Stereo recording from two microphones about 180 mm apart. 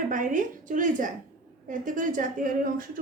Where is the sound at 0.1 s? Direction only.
45° right (ahead or behind).